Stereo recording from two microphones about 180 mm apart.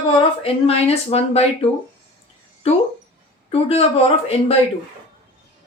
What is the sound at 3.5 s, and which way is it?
Speech, 35° left (ahead or behind).